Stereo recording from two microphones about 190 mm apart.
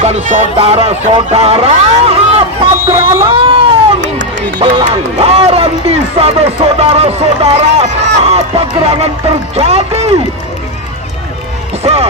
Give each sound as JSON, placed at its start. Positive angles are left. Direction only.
{"t": 0.0, "sound": "speech", "side_deg": -35}
{"t": 2.7, "sound": "a sound", "side_deg": -15}
{"t": 3.3, "sound": "cat", "side_deg": -30}
{"t": 4.0, "sound": "run", "side_deg": -70}
{"t": 4.6, "sound": "music", "side_deg": -25}
{"t": 4.9, "sound": "speech", "side_deg": -30}
{"t": 11.8, "sound": "speech", "side_deg": -30}